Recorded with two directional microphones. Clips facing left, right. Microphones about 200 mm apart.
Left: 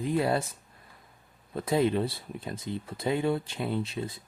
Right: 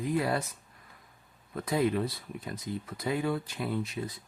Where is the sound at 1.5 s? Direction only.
25° left (ahead or behind).